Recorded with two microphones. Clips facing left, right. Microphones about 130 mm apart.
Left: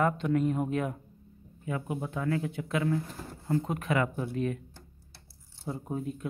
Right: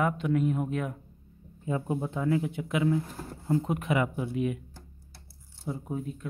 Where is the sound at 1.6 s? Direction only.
25° right (ahead or behind).